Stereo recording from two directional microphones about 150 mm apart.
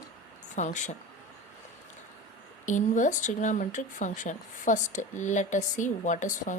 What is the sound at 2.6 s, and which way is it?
A woman's voice, 55° left (ahead or behind).